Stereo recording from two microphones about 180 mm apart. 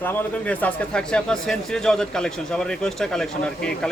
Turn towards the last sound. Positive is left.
turn(degrees=5)  # may be behind; listen again after turning